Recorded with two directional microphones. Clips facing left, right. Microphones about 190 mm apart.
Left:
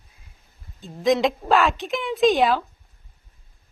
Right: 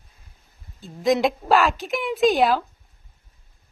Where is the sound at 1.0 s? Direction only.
Centre (ahead or behind).